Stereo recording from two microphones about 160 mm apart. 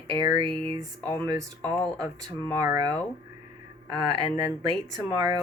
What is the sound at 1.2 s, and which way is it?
Speech, 20° right (ahead or behind).